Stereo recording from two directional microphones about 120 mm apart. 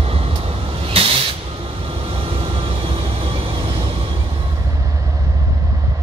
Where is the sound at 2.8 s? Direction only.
50° right (ahead or behind).